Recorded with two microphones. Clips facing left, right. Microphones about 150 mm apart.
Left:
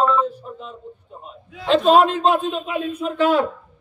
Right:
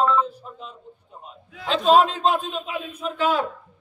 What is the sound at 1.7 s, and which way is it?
A man's voice, 55° left (ahead or behind).